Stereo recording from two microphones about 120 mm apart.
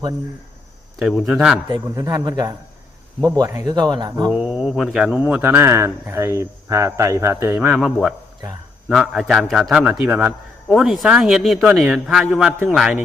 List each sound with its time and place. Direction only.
0.9 s a man's voice: centre (ahead or behind)
2.0 s speech: 25° right (ahead or behind)
4.3 s a man's voice: 5° right (ahead or behind)
5.2 s speech: 15° right (ahead or behind)
7.7 s a man's voice: 5° right (ahead or behind)